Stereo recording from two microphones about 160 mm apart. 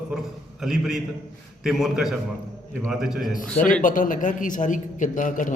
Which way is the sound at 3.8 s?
55° left (ahead or behind).